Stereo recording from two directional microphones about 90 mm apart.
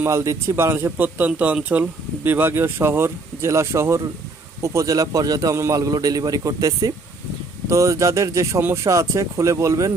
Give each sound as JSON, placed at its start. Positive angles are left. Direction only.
{"t": 0.0, "sound": "a man's voice", "side_deg": -30}